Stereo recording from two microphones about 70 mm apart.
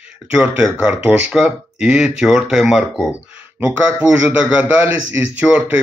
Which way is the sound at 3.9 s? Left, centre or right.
Right.